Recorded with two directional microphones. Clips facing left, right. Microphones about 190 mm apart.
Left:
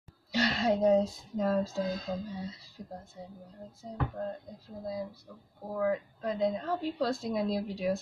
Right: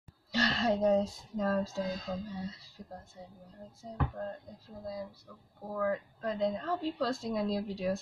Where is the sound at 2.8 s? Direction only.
20° left (ahead or behind).